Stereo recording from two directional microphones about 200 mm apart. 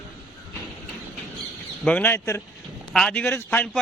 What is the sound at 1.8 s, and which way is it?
Speech, 10° left (ahead or behind).